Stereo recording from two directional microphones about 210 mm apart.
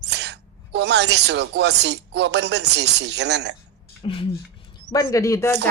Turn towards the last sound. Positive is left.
turn(degrees=15)  # may be behind; listen again after turning